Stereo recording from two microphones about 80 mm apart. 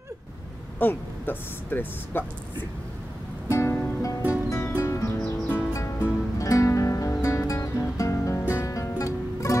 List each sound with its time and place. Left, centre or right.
0.7 s speech: left
3.4 s music: left